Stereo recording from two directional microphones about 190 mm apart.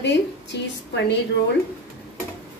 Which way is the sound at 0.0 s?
65° left (ahead or behind).